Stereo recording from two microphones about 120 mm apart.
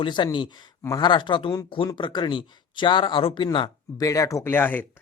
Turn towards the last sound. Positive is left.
turn(degrees=15)  # may be behind; listen again after turning